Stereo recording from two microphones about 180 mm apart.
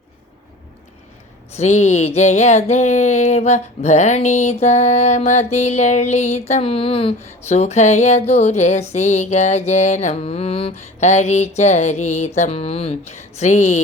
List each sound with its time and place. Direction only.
1.5 s music: 40° left (ahead or behind)